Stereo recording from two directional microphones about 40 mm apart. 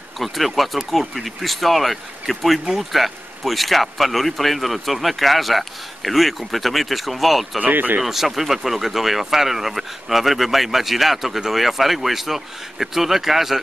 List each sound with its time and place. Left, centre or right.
0.2 s speech: centre
7.6 s speech: right
8.0 s speech: centre